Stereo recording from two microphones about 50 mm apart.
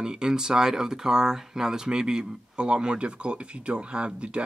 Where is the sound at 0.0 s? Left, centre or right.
Centre.